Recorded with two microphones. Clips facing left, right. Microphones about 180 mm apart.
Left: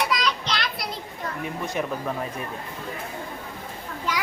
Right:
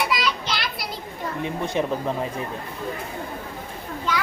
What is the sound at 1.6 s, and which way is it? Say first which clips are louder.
Speech: right 4 dB; 30° right (ahead or behind).